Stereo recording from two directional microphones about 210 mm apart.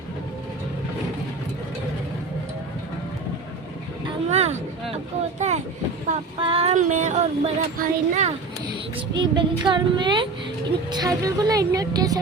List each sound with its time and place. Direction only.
4.0 s vehicle: 30° right (ahead or behind)
6.4 s child singing: 25° right (ahead or behind)
9.0 s speech: 20° right (ahead or behind)